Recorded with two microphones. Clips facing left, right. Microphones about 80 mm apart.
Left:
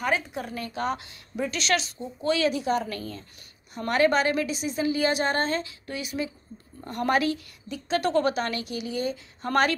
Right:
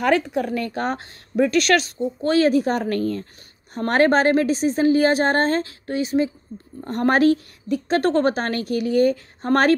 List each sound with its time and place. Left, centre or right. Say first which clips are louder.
0.0 s a woman's voice: right 8 dB; right
1.3 s a woman's voice: right 9 dB; right